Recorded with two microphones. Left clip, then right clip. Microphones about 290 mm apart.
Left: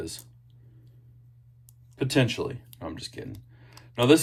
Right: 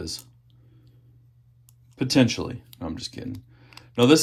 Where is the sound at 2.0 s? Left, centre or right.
Centre.